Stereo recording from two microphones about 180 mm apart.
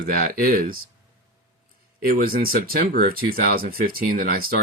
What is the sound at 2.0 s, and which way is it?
Speech, 55° right (ahead or behind).